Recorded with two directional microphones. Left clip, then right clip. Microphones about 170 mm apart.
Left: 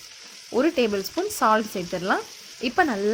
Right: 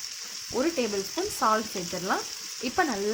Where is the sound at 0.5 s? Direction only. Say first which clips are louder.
Left 6 dB; 35° left (ahead or behind).